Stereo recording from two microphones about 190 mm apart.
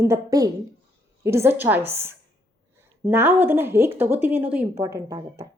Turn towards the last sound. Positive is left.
turn(degrees=-15)  # may be behind; listen again after turning